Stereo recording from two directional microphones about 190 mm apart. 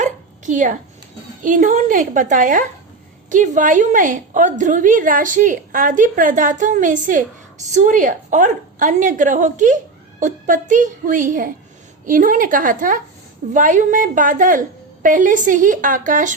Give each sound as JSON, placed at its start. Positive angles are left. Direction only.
{"t": 0.0, "sound": "dog", "side_deg": -40}
{"t": 1.5, "sound": "a woman's voice", "side_deg": -40}